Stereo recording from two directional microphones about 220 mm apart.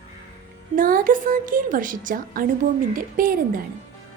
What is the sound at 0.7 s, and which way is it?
A woman's voice, 40° right (ahead or behind).